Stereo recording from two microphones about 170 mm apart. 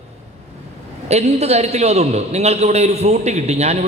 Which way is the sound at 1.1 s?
40° right (ahead or behind).